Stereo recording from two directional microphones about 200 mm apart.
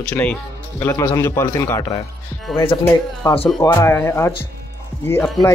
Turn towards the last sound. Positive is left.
turn(degrees=10)  # may be behind; listen again after turning